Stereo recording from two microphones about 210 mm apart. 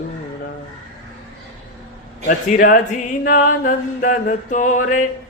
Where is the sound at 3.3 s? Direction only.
40° left (ahead or behind).